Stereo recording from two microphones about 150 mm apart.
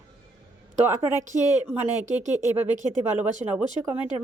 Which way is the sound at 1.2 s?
55° right (ahead or behind).